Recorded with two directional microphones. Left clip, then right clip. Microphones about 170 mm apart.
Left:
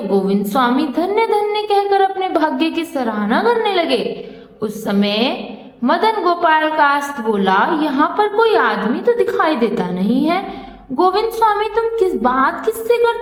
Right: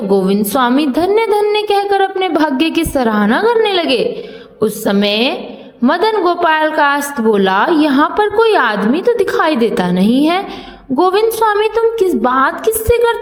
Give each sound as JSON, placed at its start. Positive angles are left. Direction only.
{"t": 0.1, "sound": "a woman's voice", "side_deg": -30}